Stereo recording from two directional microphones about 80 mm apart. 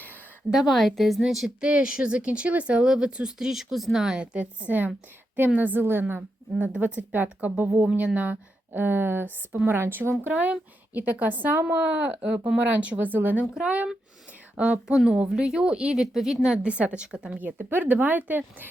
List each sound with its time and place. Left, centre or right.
0.5 s a woman's voice: centre
5.5 s a woman's voice: right
13.4 s speech: centre